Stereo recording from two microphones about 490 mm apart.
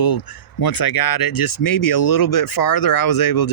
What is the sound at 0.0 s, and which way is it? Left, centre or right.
Speech, left.